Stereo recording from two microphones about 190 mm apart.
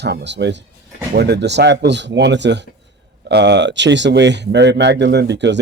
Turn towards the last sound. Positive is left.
turn(degrees=-65)  # may be behind; listen again after turning